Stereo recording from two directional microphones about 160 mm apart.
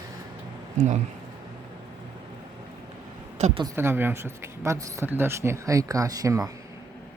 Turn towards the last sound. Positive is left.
turn(degrees=-20)  # may be behind; listen again after turning